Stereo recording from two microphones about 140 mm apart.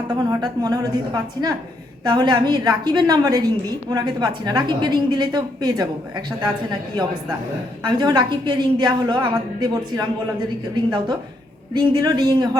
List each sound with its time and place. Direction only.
0.1 s a woman's voice: 30° right (ahead or behind)
11.7 s a woman's voice: 30° right (ahead or behind)